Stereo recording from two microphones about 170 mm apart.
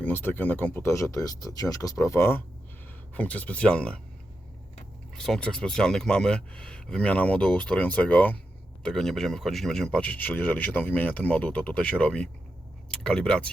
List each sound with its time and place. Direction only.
0.0 s speech: 10° left (ahead or behind)
5.1 s speech: 5° left (ahead or behind)